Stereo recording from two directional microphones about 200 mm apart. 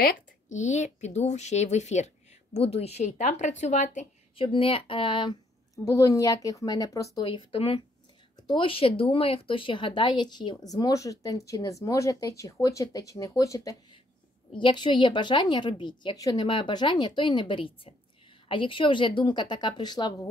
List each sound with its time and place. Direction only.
0.0 s a woman's voice: 35° left (ahead or behind); by 7.2 s 15° left (ahead or behind)
7.2 s speech: 25° left (ahead or behind)